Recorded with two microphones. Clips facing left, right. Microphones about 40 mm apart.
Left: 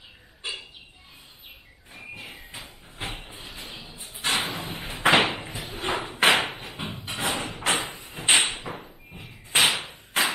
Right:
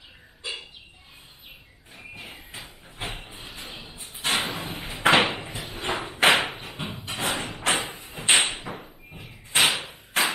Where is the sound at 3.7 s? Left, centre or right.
Right.